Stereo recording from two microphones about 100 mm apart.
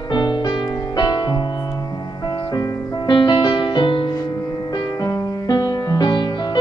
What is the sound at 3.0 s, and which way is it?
Music, 50° left (ahead or behind).